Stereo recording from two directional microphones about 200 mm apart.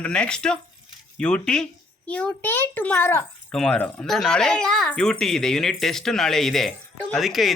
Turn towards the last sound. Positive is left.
turn(degrees=0)  # may be behind; listen again after turning